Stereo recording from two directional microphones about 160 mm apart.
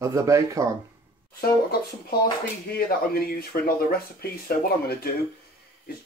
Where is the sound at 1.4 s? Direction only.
70° left (ahead or behind).